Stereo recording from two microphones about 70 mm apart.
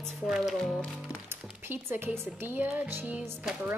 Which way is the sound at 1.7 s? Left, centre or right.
Right.